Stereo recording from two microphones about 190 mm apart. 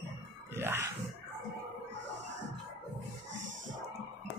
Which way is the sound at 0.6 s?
10° right (ahead or behind).